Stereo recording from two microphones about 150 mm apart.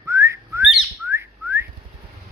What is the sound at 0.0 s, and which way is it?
Whistling, 20° right (ahead or behind).